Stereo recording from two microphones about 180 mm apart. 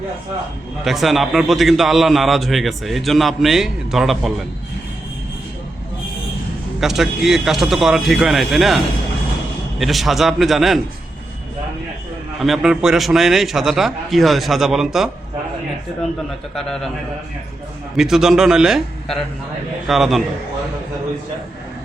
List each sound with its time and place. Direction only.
0.9 s a man's voice: centre (ahead or behind)
6.7 s a man's voice: centre (ahead or behind)
12.4 s a man's voice: centre (ahead or behind)
16.1 s a man's voice: centre (ahead or behind)
17.9 s a man's voice: centre (ahead or behind)